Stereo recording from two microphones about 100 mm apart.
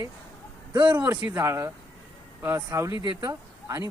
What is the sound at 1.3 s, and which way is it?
Speech, 30° right (ahead or behind).